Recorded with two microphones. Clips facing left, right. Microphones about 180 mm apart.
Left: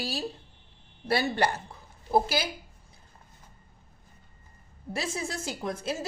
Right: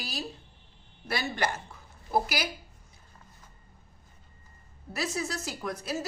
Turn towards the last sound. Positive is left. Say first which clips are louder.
# left 3 dB
turn(degrees=25)  # may be behind; listen again after turning